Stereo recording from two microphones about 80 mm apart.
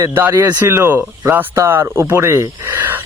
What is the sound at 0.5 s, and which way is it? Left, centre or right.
Speech, right.